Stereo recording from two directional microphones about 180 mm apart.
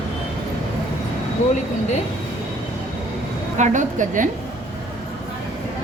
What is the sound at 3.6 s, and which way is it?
Speech, 45° right (ahead or behind).